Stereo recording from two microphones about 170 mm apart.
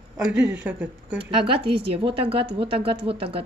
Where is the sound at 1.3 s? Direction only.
30° right (ahead or behind).